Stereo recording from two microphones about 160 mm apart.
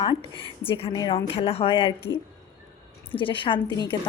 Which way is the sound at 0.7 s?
35° left (ahead or behind).